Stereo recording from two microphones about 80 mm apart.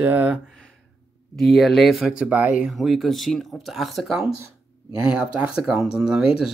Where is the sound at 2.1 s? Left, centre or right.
Centre.